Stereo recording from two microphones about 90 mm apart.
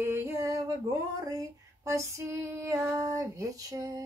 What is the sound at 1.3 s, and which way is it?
Female singing, 40° right (ahead or behind).